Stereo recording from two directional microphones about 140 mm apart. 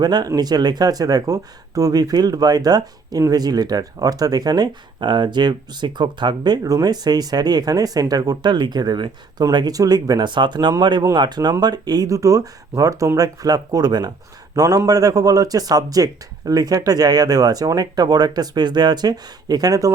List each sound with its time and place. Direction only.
0.0 s speech: 30° right (ahead or behind)